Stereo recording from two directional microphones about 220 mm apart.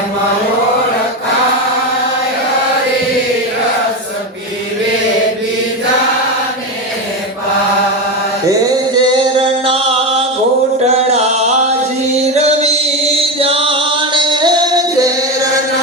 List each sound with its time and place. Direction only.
9.0 s male singing: 25° right (ahead or behind)
11.1 s music: 30° right (ahead or behind)